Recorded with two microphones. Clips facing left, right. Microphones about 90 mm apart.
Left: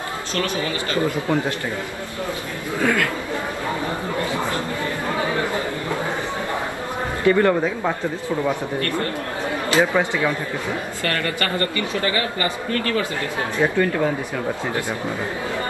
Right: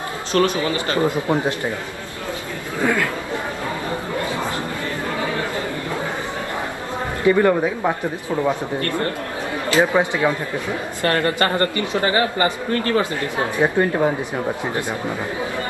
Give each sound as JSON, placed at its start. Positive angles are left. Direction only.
{"t": 0.4, "sound": "speech", "side_deg": -25}
{"t": 2.8, "sound": "speech", "side_deg": -20}
{"t": 7.2, "sound": "speech", "side_deg": -10}
{"t": 9.8, "sound": "speech", "side_deg": -20}